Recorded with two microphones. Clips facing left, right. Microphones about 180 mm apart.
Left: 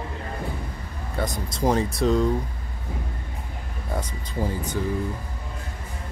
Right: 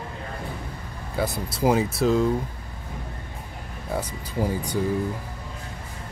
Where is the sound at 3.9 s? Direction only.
10° right (ahead or behind).